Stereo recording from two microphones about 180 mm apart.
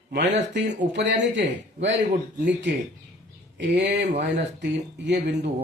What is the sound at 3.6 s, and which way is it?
Speech, 70° right (ahead or behind).